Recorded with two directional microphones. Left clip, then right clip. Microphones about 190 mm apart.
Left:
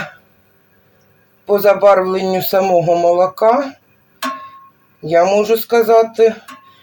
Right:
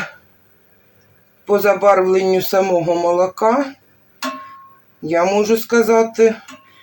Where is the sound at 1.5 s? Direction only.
10° right (ahead or behind).